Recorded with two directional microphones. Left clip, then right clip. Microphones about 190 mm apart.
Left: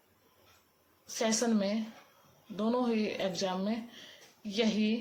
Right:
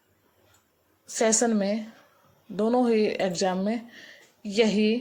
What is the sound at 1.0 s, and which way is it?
A woman's voice, 35° right (ahead or behind).